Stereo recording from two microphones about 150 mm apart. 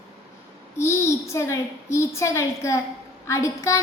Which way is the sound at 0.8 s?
20° left (ahead or behind).